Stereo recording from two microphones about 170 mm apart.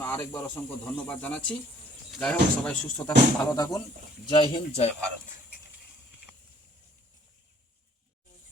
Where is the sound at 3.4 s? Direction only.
20° left (ahead or behind).